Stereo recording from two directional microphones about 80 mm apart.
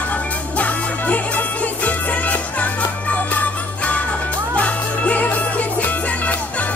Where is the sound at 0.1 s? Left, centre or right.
Centre.